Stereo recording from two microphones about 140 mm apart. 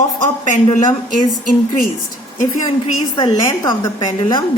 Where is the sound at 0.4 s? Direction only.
65° left (ahead or behind).